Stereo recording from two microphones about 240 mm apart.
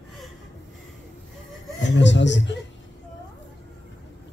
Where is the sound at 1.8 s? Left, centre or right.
Left.